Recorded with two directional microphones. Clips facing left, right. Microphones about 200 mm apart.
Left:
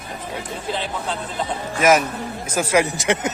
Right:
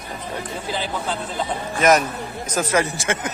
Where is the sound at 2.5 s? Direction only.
10° left (ahead or behind).